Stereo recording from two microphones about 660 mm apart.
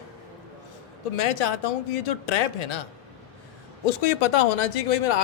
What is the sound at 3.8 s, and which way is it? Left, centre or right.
Speech, left.